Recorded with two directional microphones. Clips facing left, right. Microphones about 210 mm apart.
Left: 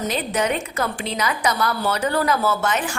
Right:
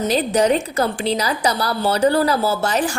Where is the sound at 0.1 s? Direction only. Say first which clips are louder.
Right 8 dB; 35° right (ahead or behind).